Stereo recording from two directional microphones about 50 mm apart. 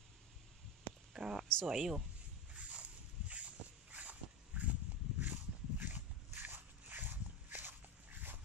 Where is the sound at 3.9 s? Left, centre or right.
Right.